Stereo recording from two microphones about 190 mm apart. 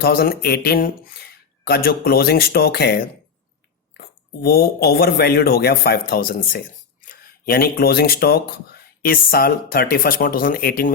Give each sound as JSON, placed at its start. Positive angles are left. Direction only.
{"t": 0.0, "sound": "speech", "side_deg": 55}
{"t": 4.4, "sound": "speech", "side_deg": 55}